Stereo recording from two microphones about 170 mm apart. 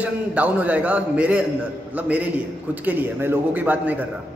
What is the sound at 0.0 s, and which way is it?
A man's voice, 10° right (ahead or behind).